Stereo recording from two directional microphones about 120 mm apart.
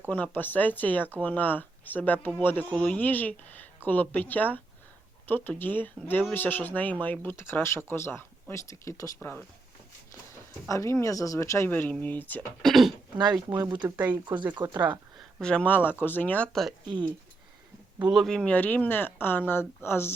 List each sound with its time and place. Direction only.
0.1 s speech: 15° left (ahead or behind)
10.7 s speech: 25° left (ahead or behind)
12.6 s speech: centre (ahead or behind)
13.5 s speech: 40° right (ahead or behind)
13.8 s speech: 15° right (ahead or behind)
14.6 s speech: 30° right (ahead or behind)
15.4 s speech: 5° left (ahead or behind)
16.8 s speech: 40° right (ahead or behind)
18.1 s speech: 5° left (ahead or behind); by 20.1 s 20° left (ahead or behind)